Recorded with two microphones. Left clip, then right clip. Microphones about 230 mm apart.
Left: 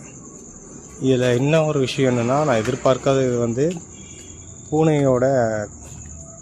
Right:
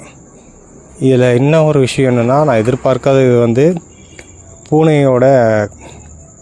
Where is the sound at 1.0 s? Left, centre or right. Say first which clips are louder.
Right 8 dB; right.